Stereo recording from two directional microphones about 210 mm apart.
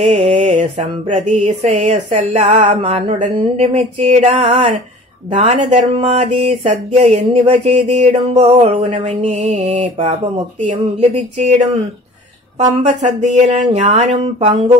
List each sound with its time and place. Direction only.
0.0 s speech: 35° right (ahead or behind)
2.6 s a sound: 30° right (ahead or behind)
5.3 s speech: 35° right (ahead or behind)
12.7 s speech: 35° right (ahead or behind)